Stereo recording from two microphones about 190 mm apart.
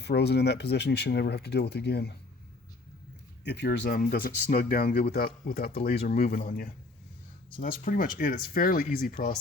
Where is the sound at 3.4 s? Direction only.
65° left (ahead or behind).